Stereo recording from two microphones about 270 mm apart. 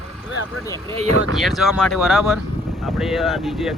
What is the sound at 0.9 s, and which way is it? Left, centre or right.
Speech, right.